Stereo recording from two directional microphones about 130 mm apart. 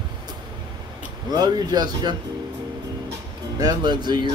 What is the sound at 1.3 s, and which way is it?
Speech, 30° right (ahead or behind).